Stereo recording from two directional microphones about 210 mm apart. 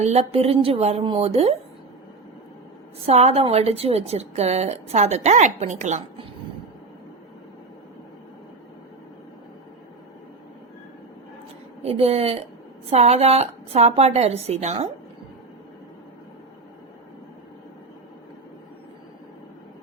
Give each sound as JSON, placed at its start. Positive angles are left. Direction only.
{"t": 0.0, "sound": "a woman's voice", "side_deg": -30}
{"t": 3.1, "sound": "a woman's voice", "side_deg": -30}
{"t": 11.8, "sound": "a woman's voice", "side_deg": -30}